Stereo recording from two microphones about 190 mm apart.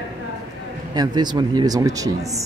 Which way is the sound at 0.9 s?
20° right (ahead or behind).